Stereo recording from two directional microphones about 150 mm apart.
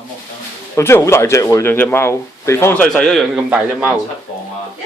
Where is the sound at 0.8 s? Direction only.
20° left (ahead or behind); by 3.9 s 5° right (ahead or behind).